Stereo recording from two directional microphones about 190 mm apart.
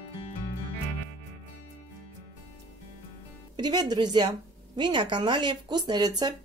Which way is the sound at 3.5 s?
20° right (ahead or behind).